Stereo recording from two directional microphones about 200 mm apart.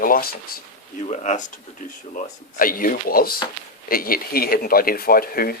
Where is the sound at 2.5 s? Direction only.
45° left (ahead or behind).